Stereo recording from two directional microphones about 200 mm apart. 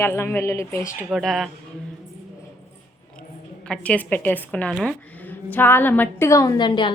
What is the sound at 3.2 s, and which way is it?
A woman's voice, 5° left (ahead or behind).